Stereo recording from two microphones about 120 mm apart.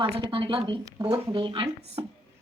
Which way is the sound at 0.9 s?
30° right (ahead or behind).